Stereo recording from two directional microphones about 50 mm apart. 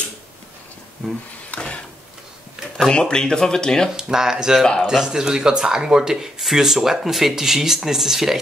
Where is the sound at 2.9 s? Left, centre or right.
Centre.